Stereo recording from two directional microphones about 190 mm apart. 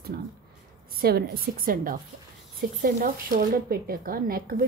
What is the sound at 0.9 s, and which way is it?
Speech, 55° right (ahead or behind).